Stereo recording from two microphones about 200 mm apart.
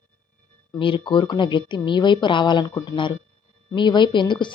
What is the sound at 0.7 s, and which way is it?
Speech, 25° left (ahead or behind).